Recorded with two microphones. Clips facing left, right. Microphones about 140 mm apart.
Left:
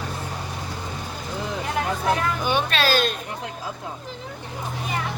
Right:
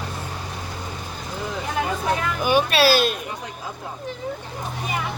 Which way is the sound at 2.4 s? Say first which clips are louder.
Right 7 dB; 10° right (ahead or behind).